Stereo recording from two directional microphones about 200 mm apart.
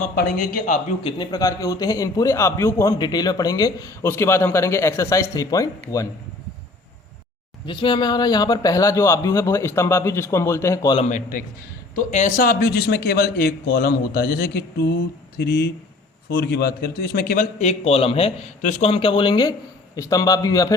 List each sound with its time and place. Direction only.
0.0 s a man's voice: 50° left (ahead or behind)
1.0 s a man's voice: 20° left (ahead or behind)
7.7 s a man's voice: 25° left (ahead or behind)
11.1 s a man's voice: 40° left (ahead or behind)
17.6 s a man's voice: 30° left (ahead or behind)